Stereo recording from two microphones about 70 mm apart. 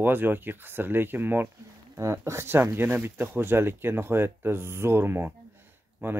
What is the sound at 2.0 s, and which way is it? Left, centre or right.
Speech, right.